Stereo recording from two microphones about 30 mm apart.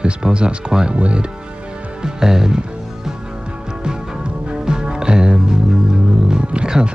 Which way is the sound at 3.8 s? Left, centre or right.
Right.